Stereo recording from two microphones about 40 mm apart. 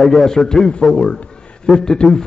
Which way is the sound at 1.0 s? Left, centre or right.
Left.